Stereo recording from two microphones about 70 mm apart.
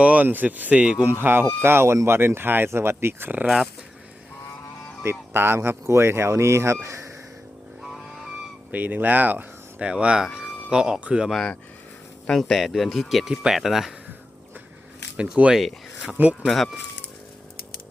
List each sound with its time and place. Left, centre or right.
0.0 s speech: right
1.2 s speech: right
5.0 s speech: right
7.8 s vehicle: centre
8.7 s speech: right
9.8 s speech: centre
11.3 s speech: centre
15.1 s speech: centre
16.1 s speech: right